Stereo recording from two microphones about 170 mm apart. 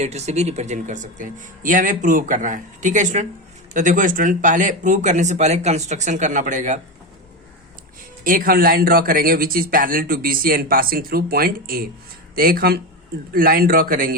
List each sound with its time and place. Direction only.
0.0 s speech: 40° right (ahead or behind)
8.2 s a man's voice: 55° right (ahead or behind)